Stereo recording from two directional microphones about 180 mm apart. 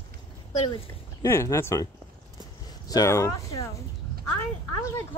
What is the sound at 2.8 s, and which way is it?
Speech, 20° left (ahead or behind).